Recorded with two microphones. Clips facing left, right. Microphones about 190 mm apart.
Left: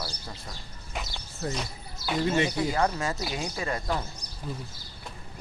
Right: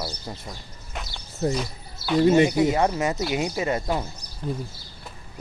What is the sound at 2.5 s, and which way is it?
Speech, 20° right (ahead or behind).